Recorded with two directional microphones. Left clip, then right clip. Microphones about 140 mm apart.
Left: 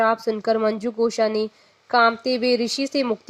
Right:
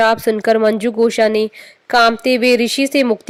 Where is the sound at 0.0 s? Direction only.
40° right (ahead or behind).